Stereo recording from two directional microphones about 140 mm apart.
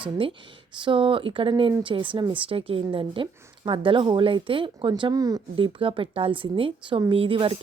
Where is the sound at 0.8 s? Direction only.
35° right (ahead or behind).